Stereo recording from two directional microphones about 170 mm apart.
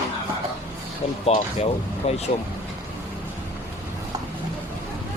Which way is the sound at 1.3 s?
35° left (ahead or behind).